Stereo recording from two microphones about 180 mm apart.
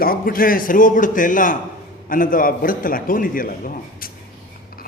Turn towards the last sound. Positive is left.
turn(degrees=50)  # may be behind; listen again after turning